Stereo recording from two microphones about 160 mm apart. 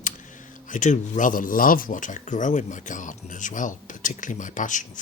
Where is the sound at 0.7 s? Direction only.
50° left (ahead or behind).